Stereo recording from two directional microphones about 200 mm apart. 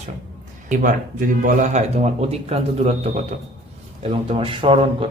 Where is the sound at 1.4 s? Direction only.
35° right (ahead or behind).